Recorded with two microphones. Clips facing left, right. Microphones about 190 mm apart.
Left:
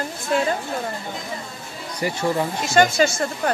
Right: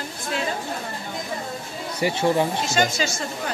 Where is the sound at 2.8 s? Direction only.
55° left (ahead or behind).